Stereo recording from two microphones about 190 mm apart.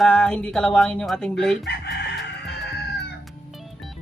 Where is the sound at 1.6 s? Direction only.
60° left (ahead or behind).